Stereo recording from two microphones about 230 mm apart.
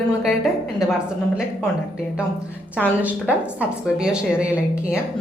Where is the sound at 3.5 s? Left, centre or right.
Centre.